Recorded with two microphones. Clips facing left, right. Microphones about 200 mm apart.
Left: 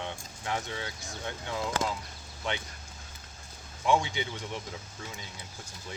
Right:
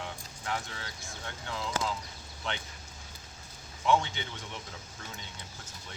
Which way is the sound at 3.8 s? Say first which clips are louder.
Left 1 dB; 15° left (ahead or behind).